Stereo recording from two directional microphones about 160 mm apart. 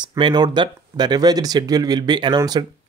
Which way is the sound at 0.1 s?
25° right (ahead or behind).